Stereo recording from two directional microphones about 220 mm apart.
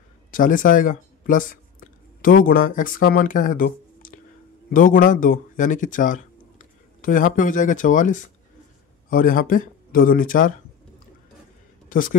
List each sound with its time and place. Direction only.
0.3 s speech: 40° left (ahead or behind)
11.9 s speech: 40° left (ahead or behind)